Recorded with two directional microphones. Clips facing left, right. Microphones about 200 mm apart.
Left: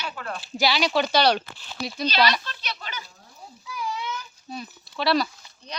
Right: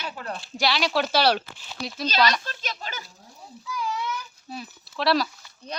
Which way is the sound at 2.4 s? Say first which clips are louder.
Right 2 dB; 45° right (ahead or behind).